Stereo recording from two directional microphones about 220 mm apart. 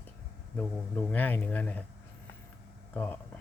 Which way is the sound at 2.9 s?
10° left (ahead or behind).